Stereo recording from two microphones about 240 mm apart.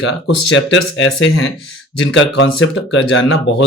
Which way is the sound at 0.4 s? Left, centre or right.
Left.